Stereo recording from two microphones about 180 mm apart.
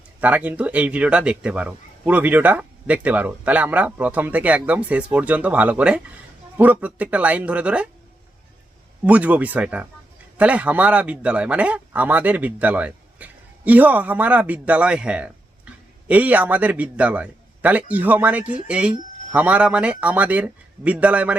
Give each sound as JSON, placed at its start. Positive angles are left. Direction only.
{"t": 0.2, "sound": "speech", "side_deg": -10}
{"t": 9.0, "sound": "speech", "side_deg": -10}